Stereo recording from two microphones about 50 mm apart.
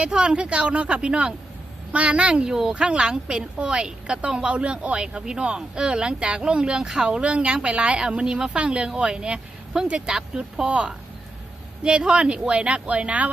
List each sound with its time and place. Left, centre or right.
0.0 s a woman's voice: centre